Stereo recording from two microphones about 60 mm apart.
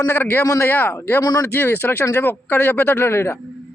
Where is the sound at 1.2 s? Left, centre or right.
Left.